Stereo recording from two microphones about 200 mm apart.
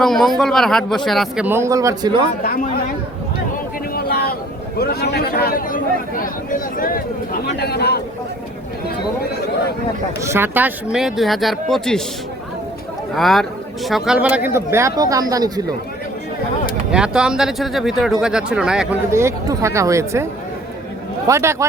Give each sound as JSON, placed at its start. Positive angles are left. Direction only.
{"t": 0.0, "sound": "speech", "side_deg": 0}
{"t": 1.5, "sound": "a man's voice", "side_deg": -15}
{"t": 2.4, "sound": "speech", "side_deg": 45}
{"t": 3.9, "sound": "vehicle", "side_deg": 50}
{"t": 4.8, "sound": "speech", "side_deg": 50}
{"t": 9.3, "sound": "speech", "side_deg": 55}
{"t": 10.2, "sound": "speech", "side_deg": -10}
{"t": 13.1, "sound": "a man's voice", "side_deg": 0}
{"t": 16.9, "sound": "speech", "side_deg": -5}
{"t": 19.1, "sound": "a man's voice", "side_deg": -15}
{"t": 21.2, "sound": "a man's voice", "side_deg": -15}